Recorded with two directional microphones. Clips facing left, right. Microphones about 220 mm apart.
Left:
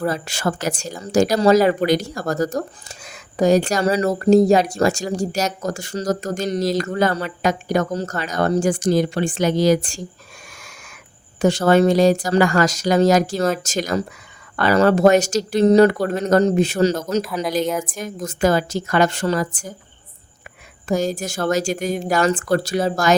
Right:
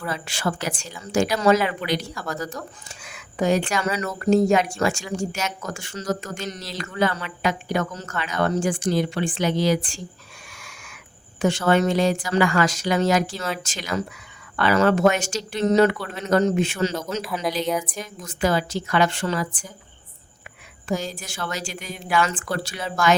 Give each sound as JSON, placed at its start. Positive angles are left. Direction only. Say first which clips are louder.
{"t": 0.0, "sound": "speech", "louder": "left 5 dB", "side_deg": 40}
{"t": 11.3, "sound": "speech", "louder": "left 5 dB", "side_deg": 40}
{"t": 17.2, "sound": "speech", "louder": "left 2 dB", "side_deg": 0}
{"t": 17.8, "sound": "a woman's voice", "louder": "left 6 dB", "side_deg": 45}
{"t": 20.8, "sound": "a woman's voice", "louder": "left 7 dB", "side_deg": 45}